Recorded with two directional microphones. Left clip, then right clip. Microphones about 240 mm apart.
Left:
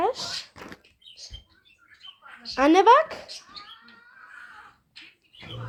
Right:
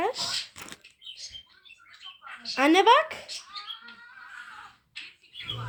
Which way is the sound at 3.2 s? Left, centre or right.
Right.